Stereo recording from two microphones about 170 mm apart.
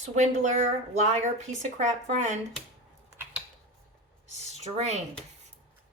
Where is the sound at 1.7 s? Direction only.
45° right (ahead or behind).